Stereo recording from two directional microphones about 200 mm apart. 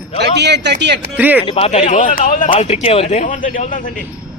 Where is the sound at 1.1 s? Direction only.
10° right (ahead or behind).